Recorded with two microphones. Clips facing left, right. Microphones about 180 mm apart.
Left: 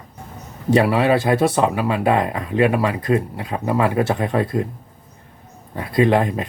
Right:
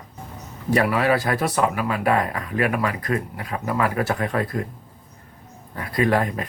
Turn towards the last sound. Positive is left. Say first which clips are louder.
# left 4 dB
turn(degrees=25)  # may be behind; listen again after turning